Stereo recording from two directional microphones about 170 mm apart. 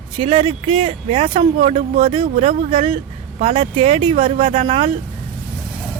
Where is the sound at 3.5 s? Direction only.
35° right (ahead or behind).